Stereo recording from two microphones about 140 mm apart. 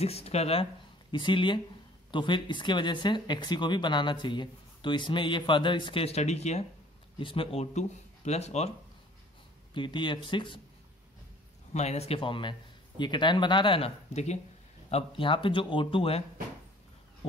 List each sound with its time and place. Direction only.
0.0 s speech: 45° left (ahead or behind)
1.1 s speech: 35° left (ahead or behind); by 6.6 s 50° left (ahead or behind)
7.2 s speech: 40° left (ahead or behind)
9.8 s speech: 35° left (ahead or behind)
11.7 s speech: 50° left (ahead or behind)